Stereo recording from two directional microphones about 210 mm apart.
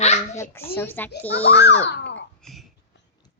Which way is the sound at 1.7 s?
55° left (ahead or behind).